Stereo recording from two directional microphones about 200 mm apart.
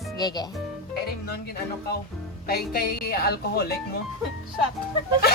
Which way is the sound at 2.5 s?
50° left (ahead or behind).